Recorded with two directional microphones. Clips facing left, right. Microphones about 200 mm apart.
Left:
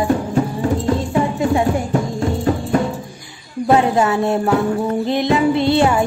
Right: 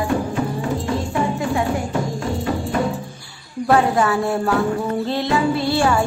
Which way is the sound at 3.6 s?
20° left (ahead or behind).